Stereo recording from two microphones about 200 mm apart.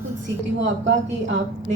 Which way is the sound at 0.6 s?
65° right (ahead or behind).